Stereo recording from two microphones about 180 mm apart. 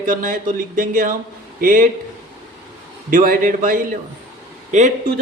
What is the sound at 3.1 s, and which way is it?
A man's voice, 50° right (ahead or behind).